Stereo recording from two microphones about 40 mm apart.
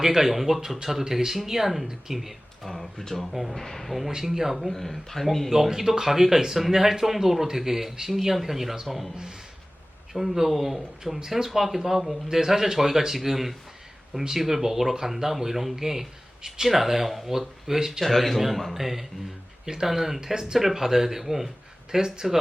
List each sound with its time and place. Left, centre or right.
0.0 s speech: centre
3.0 s speech: centre
4.1 s speech: centre
4.7 s speech: centre
5.5 s speech: centre
10.1 s speech: centre
18.0 s a man's voice: centre